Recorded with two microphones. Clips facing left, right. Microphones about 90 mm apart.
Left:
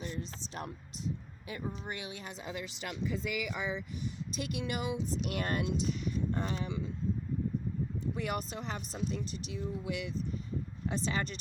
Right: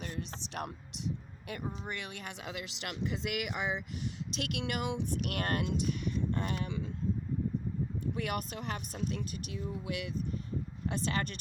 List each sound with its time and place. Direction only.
0.0 s a woman's voice: 70° right (ahead or behind)
8.0 s speech: 60° right (ahead or behind)